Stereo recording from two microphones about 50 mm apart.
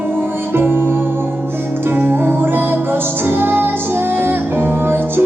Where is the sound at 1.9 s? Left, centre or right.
Right.